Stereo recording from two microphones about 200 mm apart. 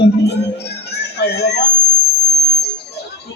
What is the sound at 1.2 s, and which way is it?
Speech, 55° left (ahead or behind).